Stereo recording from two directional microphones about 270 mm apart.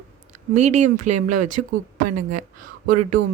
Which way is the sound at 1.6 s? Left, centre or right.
Right.